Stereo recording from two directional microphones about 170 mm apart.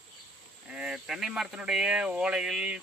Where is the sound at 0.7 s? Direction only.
5° right (ahead or behind).